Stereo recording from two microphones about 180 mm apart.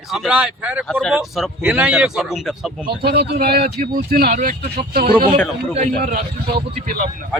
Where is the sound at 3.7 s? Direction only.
45° right (ahead or behind).